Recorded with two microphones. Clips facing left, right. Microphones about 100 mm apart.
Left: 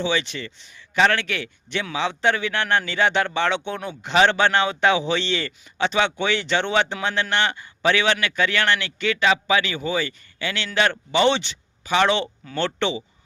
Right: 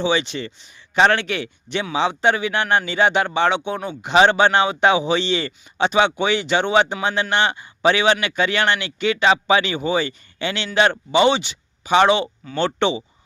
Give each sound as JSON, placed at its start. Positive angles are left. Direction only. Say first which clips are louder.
{"t": 0.0, "sound": "a man's voice", "louder": "right 4 dB", "side_deg": -20}